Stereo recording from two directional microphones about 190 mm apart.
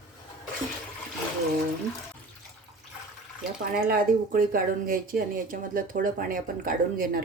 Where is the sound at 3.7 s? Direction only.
50° right (ahead or behind).